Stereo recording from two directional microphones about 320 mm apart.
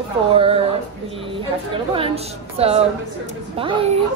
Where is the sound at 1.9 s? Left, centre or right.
Centre.